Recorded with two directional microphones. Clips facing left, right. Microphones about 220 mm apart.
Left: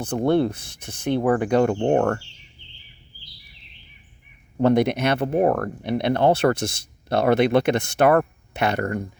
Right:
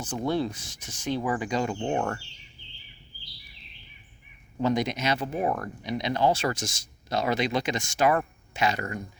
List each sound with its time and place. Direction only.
0.0 s speech: 60° left (ahead or behind)
4.6 s speech: 60° left (ahead or behind)